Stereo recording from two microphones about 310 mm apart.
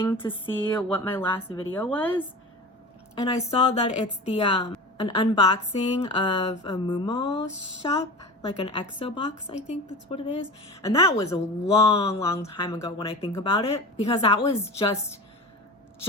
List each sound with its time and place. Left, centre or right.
0.0 s a woman's voice: centre
3.2 s a woman's voice: centre